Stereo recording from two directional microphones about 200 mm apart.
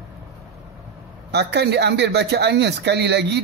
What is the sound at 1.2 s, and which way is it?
Speech, 55° right (ahead or behind).